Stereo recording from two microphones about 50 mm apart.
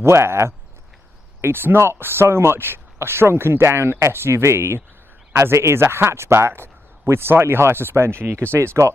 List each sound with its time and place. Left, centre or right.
0.0 s speech: right
1.4 s speech: right